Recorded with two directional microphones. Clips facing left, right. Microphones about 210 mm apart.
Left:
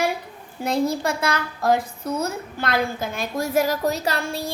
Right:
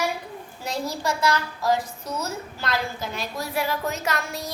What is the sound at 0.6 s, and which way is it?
A child's voice, 55° left (ahead or behind).